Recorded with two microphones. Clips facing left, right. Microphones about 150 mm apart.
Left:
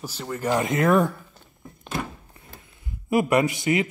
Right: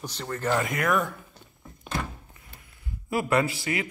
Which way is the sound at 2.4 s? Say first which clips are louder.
Left 5 dB; 30° left (ahead or behind).